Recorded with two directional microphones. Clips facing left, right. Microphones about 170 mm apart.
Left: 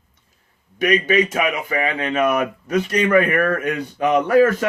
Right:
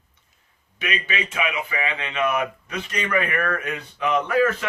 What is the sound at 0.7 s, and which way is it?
A man's voice, 40° left (ahead or behind).